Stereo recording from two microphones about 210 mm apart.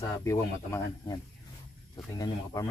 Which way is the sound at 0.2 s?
15° left (ahead or behind).